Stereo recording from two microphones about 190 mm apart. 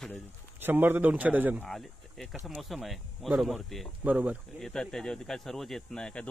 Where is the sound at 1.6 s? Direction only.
Centre (ahead or behind).